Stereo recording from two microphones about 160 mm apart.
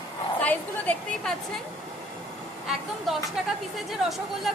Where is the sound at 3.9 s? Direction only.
Centre (ahead or behind).